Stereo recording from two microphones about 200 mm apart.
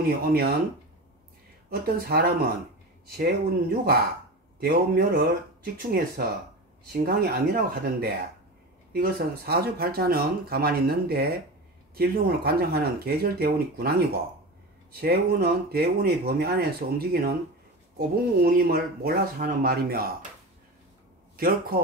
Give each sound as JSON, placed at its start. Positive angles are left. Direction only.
{"t": 0.0, "sound": "speech", "side_deg": -50}
{"t": 1.7, "sound": "speech", "side_deg": -50}
{"t": 21.4, "sound": "speech", "side_deg": -50}